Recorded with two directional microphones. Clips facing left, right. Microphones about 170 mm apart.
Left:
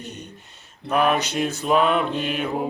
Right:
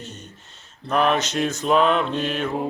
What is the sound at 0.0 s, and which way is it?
Mantra, 15° left (ahead or behind).